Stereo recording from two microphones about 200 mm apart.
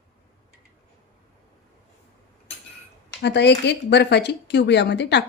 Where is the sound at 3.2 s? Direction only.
60° left (ahead or behind).